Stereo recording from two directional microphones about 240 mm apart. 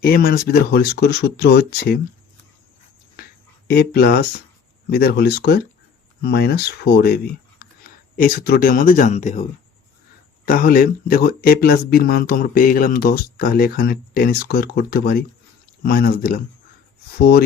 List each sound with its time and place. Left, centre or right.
0.0 s speech: left
3.7 s speech: left